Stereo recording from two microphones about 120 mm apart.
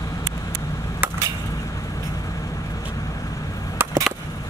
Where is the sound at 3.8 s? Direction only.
15° right (ahead or behind).